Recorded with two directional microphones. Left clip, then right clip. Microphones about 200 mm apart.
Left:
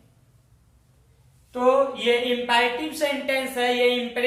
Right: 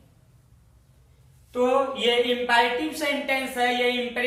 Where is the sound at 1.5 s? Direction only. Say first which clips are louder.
Left 2 dB; 10° left (ahead or behind).